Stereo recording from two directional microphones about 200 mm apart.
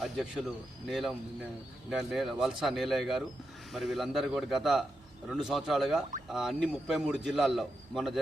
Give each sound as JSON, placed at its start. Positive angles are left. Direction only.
{"t": 0.0, "sound": "a man's voice", "side_deg": 0}